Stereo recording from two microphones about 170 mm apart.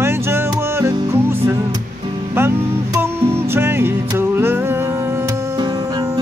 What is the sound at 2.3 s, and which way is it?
Music, 15° right (ahead or behind).